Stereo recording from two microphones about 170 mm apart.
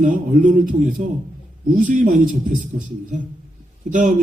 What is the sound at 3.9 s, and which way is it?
Speech, 50° right (ahead or behind).